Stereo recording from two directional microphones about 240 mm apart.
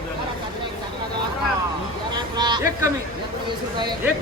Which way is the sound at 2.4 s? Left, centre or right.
Centre.